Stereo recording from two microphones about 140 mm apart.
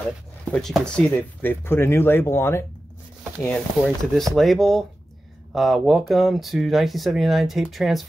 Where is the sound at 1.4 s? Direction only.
15° left (ahead or behind).